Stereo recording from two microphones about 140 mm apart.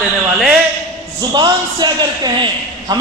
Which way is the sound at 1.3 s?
30° right (ahead or behind).